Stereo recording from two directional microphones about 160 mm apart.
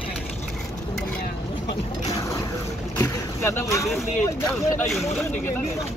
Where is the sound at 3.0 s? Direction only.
15° left (ahead or behind).